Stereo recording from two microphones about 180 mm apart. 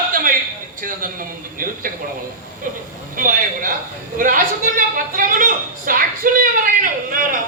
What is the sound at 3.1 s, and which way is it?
A woman's voice, 50° right (ahead or behind).